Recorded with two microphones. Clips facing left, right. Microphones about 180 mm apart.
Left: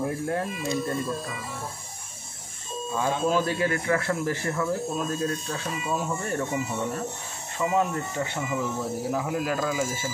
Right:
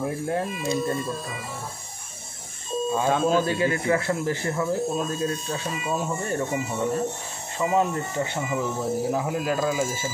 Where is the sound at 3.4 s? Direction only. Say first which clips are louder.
Right 2 dB; 20° right (ahead or behind).